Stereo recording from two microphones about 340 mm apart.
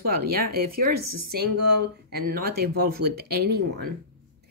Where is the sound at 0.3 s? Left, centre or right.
Right.